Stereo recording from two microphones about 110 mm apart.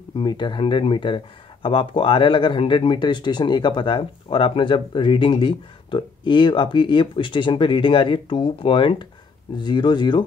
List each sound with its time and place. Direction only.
0.1 s speech: 45° left (ahead or behind)